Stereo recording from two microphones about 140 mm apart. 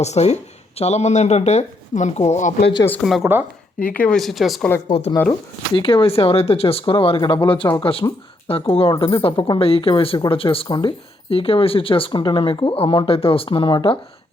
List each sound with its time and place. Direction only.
0.0 s speech: 50° left (ahead or behind)
3.0 s speech: centre (ahead or behind)
4.9 s speech: 50° left (ahead or behind)
5.3 s speech: 35° left (ahead or behind)